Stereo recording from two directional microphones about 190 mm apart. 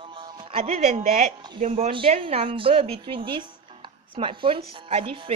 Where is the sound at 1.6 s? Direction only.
35° right (ahead or behind).